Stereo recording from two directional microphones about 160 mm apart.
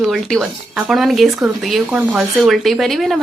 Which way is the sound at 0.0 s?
Centre (ahead or behind).